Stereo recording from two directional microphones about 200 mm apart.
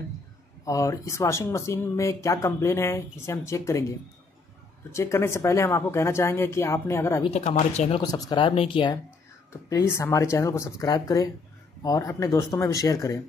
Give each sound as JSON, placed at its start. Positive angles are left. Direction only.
{"t": 0.7, "sound": "speech", "side_deg": 15}
{"t": 4.9, "sound": "speech", "side_deg": 15}
{"t": 7.2, "sound": "speech", "side_deg": 30}
{"t": 8.0, "sound": "speech", "side_deg": 20}